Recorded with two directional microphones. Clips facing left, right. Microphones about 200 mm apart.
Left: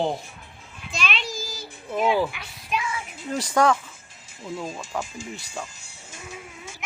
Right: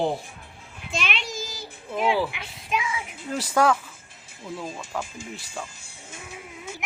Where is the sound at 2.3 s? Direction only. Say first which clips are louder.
Right 1 dB; 20° right (ahead or behind).